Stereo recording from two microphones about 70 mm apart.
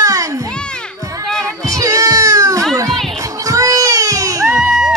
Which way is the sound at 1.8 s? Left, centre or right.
Right.